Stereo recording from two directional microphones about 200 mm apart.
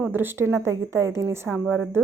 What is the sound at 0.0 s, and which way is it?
A woman's voice, 10° right (ahead or behind).